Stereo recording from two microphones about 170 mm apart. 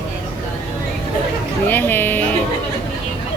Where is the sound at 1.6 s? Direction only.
10° left (ahead or behind).